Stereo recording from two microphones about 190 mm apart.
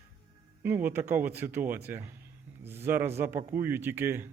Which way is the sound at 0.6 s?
10° right (ahead or behind).